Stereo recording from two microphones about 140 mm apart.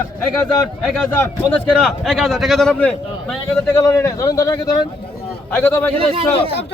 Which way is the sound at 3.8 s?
25° left (ahead or behind).